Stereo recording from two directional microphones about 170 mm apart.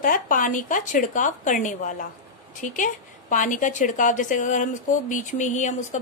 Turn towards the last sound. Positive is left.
turn(degrees=45)  # may be behind; listen again after turning